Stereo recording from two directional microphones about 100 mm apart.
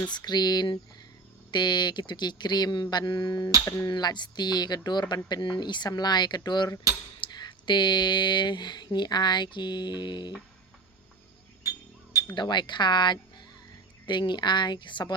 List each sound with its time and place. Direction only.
0.1 s speech: 45° left (ahead or behind)
12.3 s speech: 50° left (ahead or behind)